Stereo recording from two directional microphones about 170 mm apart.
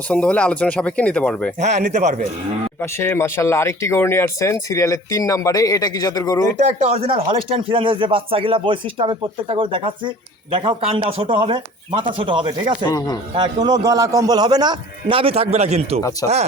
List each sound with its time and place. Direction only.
0.1 s speech: 5° left (ahead or behind)
1.5 s speech: 45° right (ahead or behind)
2.8 s speech: 15° left (ahead or behind)
6.6 s speech: 40° right (ahead or behind)
12.9 s speech: 20° left (ahead or behind)
13.3 s speech: 25° right (ahead or behind)
16.2 s speech: 20° left (ahead or behind)